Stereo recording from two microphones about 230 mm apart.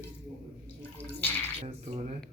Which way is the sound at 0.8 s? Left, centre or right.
Centre.